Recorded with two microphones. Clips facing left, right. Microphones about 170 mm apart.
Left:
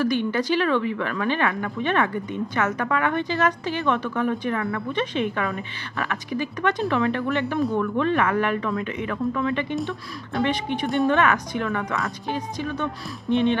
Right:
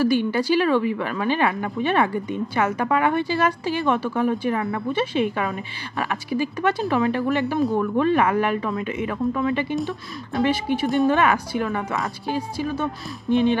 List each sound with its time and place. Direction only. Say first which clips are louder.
0.0 s a woman's voice: right 3 dB; 10° right (ahead or behind)
4.6 s a woman's voice: right 1 dB; 20° right (ahead or behind)
4.9 s a woman's voice: right 3 dB; 10° right (ahead or behind)
5.4 s a woman's voice: right 1 dB; 20° right (ahead or behind)
6.3 s a woman's voice: right 2 dB; 10° right (ahead or behind)